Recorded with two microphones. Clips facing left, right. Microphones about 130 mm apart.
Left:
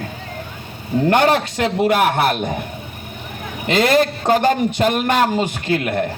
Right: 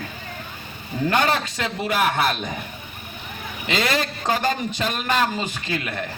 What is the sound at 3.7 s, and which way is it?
A man's voice, 55° left (ahead or behind).